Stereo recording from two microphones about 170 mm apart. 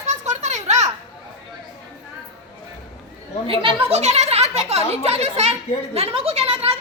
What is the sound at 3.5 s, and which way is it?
Speech, 35° right (ahead or behind).